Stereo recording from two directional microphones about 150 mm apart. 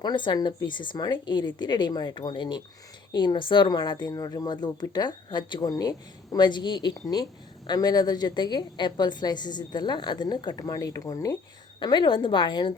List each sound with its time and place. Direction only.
0.0 s a woman's voice: 30° left (ahead or behind)